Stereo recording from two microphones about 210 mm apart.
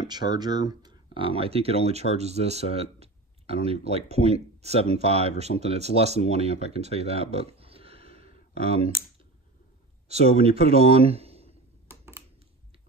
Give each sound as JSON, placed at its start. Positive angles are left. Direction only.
{"t": 0.0, "sound": "speech", "side_deg": -20}
{"t": 10.0, "sound": "speech", "side_deg": -30}